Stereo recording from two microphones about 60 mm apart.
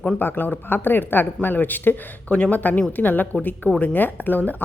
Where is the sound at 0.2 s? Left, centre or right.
Left.